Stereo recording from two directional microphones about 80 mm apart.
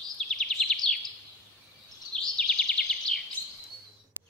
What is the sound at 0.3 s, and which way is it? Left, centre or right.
Bird vocalization, centre.